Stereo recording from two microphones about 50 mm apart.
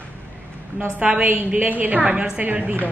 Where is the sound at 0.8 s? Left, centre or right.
Right.